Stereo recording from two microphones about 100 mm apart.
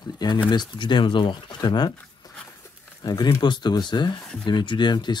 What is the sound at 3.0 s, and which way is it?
Speech, 45° left (ahead or behind).